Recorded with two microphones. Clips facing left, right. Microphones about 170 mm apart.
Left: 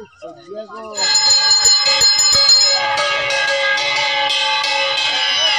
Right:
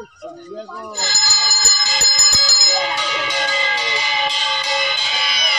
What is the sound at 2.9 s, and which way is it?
Music, 75° left (ahead or behind).